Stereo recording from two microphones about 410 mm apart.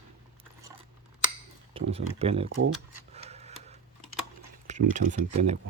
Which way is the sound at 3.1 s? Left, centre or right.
Centre.